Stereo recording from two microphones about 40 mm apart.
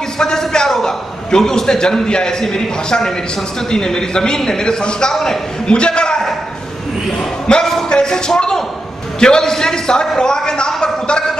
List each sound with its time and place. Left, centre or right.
0.2 s a sound: centre
1.3 s a man's voice: centre
5.7 s a man's voice: left